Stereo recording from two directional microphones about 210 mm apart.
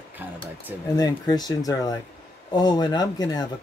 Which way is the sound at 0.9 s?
20° left (ahead or behind).